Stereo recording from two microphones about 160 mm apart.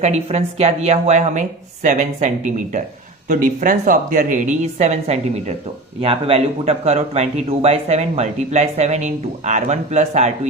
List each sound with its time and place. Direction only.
0.0 s a man's voice: 40° right (ahead or behind)